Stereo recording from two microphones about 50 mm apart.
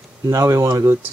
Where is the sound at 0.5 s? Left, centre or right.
Right.